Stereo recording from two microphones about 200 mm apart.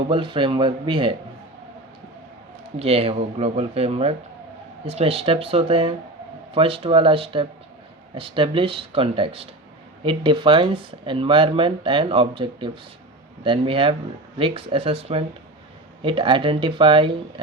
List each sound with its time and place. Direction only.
0.1 s speech: 25° right (ahead or behind)
2.7 s speech: 30° right (ahead or behind)